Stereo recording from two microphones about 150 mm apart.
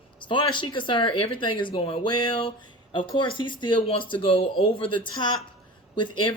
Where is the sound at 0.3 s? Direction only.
30° left (ahead or behind).